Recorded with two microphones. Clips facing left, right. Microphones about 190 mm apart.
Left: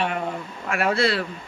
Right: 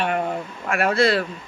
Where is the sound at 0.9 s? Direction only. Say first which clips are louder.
Right 5 dB; 45° right (ahead or behind).